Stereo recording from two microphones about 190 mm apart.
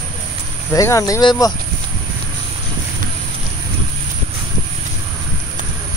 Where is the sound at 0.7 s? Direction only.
15° left (ahead or behind).